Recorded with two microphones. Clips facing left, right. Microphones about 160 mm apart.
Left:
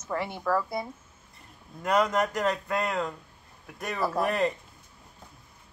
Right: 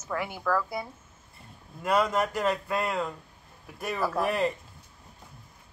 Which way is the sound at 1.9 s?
5° right (ahead or behind).